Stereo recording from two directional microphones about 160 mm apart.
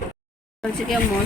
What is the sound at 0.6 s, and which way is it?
Speech, 5° left (ahead or behind).